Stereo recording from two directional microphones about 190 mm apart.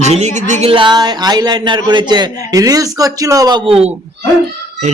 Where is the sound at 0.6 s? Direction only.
25° right (ahead or behind).